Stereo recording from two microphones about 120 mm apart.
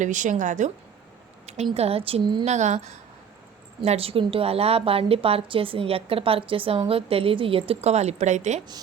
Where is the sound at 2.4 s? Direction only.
75° right (ahead or behind).